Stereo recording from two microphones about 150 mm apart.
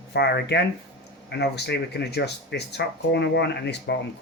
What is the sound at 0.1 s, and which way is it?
Speech, 90° left.